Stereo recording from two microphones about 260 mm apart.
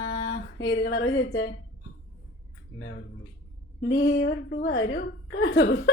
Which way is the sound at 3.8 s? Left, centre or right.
Left.